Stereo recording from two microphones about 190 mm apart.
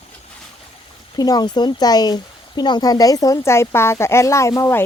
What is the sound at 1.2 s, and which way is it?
Speech, 20° left (ahead or behind).